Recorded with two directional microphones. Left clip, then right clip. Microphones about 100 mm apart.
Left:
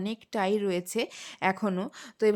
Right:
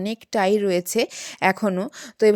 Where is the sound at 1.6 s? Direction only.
35° right (ahead or behind).